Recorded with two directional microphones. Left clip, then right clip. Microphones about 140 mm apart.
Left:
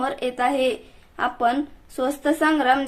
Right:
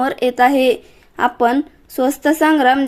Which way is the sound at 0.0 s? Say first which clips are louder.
Right 9 dB; 45° right (ahead or behind).